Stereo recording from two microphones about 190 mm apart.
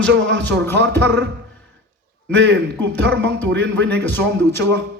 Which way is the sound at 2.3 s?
70° right (ahead or behind).